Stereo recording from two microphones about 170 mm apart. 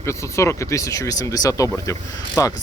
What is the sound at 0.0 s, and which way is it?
Speech, 15° left (ahead or behind).